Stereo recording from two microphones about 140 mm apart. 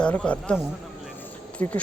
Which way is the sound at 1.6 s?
15° left (ahead or behind).